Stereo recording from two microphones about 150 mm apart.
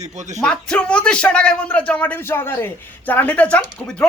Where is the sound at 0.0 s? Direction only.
50° right (ahead or behind).